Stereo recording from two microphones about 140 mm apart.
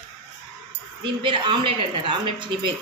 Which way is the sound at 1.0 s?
35° right (ahead or behind).